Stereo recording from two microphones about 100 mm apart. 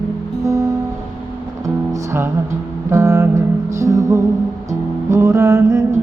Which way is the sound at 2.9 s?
25° right (ahead or behind).